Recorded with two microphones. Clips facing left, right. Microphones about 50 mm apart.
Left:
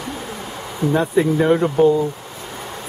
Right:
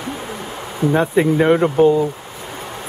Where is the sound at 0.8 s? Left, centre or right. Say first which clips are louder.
Right 2 dB; right.